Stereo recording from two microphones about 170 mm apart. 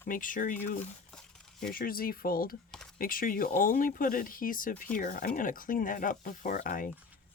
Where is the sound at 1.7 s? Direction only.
60° left (ahead or behind).